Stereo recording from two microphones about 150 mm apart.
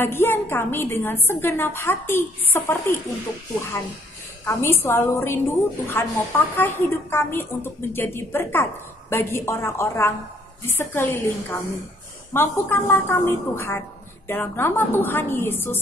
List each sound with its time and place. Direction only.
0.0 s a woman's voice: 15° left (ahead or behind)
4.5 s a woman's voice: 15° left (ahead or behind)